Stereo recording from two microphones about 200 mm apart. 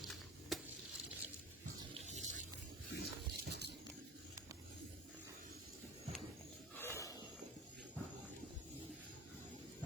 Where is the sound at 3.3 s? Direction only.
55° right (ahead or behind).